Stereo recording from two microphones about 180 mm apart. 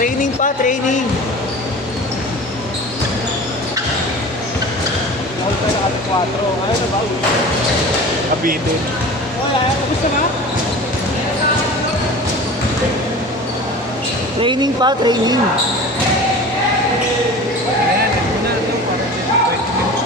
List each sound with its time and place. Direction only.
0.0 s speech: 45° left (ahead or behind)
14.4 s speech: 25° right (ahead or behind)